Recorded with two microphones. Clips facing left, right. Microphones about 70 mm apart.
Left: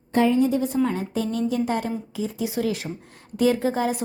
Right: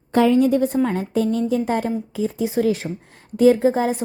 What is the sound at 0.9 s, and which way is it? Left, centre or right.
A woman's voice, right.